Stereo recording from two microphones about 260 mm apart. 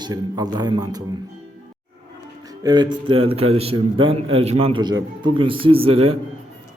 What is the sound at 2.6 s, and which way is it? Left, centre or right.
Speech, centre.